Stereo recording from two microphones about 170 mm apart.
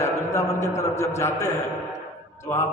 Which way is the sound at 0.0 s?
15° left (ahead or behind).